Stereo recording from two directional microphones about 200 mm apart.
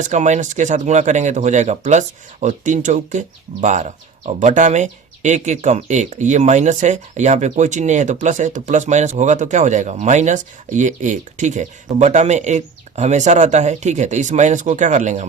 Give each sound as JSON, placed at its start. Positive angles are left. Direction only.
{"t": 0.0, "sound": "speech", "side_deg": -35}